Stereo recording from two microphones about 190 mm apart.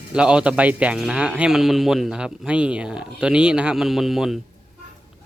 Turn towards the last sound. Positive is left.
turn(degrees=0)  # may be behind; listen again after turning